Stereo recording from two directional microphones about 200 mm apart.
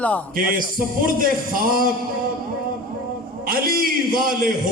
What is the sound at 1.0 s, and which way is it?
Speech, 45° right (ahead or behind).